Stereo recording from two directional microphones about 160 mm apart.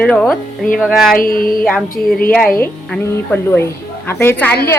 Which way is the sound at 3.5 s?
15° left (ahead or behind).